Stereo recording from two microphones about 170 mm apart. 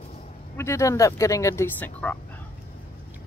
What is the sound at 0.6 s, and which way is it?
Speech, 15° left (ahead or behind).